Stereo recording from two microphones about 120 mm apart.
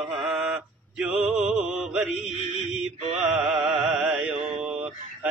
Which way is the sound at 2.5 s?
5° right (ahead or behind).